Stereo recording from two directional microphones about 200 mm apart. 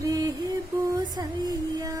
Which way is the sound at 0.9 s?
20° right (ahead or behind).